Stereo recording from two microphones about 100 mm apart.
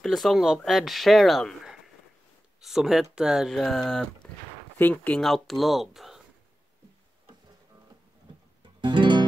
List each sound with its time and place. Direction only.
0.0 s speech: centre (ahead or behind)
4.7 s speech: 20° left (ahead or behind)
5.2 s speech: centre (ahead or behind)
8.8 s music: 50° right (ahead or behind)